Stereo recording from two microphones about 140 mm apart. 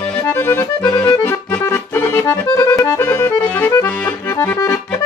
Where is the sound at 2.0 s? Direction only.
20° left (ahead or behind).